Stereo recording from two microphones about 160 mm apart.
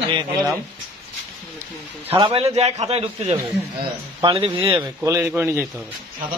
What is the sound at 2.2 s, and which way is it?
A man's voice, 35° right (ahead or behind).